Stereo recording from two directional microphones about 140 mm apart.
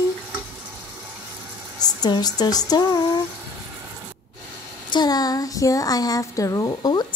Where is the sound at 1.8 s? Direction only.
30° left (ahead or behind).